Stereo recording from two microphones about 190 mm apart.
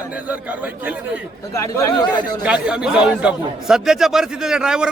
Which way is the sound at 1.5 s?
15° left (ahead or behind).